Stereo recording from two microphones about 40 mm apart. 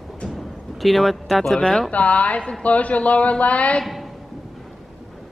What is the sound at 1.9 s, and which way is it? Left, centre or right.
A man's voice, left.